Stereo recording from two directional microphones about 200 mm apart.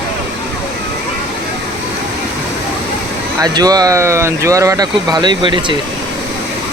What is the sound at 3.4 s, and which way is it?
Speech, 20° right (ahead or behind).